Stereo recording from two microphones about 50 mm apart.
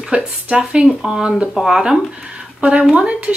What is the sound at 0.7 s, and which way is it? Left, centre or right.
Speech, centre.